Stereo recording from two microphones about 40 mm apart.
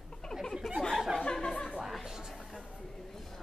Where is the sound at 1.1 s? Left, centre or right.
Centre.